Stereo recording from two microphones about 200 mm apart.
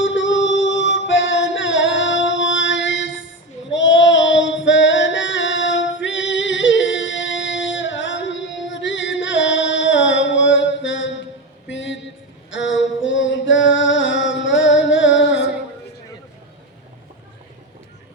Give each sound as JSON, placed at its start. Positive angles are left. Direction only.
{"t": 0.0, "sound": "music", "side_deg": 65}
{"t": 3.7, "sound": "female singing", "side_deg": 65}
{"t": 11.7, "sound": "a sound", "side_deg": 65}
{"t": 12.5, "sound": "singing", "side_deg": 65}